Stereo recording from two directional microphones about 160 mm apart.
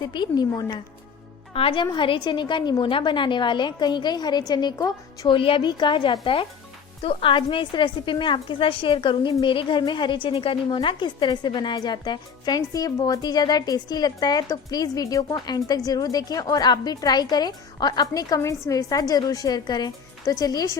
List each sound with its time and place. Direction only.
0.0 s a woman's voice: 25° left (ahead or behind)
5.4 s a woman's voice: 35° left (ahead or behind)